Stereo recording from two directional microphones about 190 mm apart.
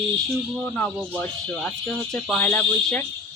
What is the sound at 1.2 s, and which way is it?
Speech, 10° left (ahead or behind).